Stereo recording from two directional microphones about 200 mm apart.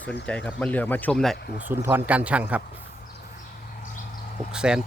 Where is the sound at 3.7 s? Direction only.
40° left (ahead or behind).